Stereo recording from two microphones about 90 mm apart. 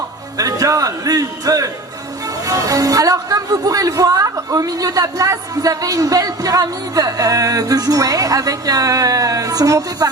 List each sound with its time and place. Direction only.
0.3 s speech: 40° right (ahead or behind)